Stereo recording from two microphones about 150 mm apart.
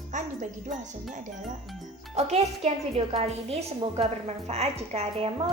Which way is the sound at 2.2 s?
45° right (ahead or behind).